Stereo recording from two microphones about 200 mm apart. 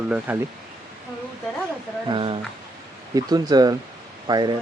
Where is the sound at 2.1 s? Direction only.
25° right (ahead or behind).